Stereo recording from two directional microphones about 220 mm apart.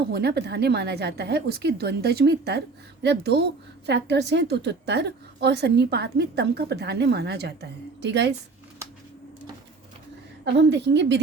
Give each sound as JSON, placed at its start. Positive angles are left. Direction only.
{"t": 0.1, "sound": "a woman's voice", "side_deg": -45}
{"t": 10.4, "sound": "a woman's voice", "side_deg": -55}